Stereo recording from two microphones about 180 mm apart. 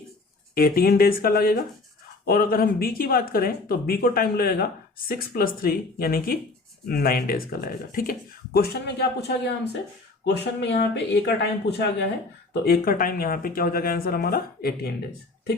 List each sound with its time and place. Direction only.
0.5 s speech: 55° left (ahead or behind)
12.6 s speech: 55° left (ahead or behind)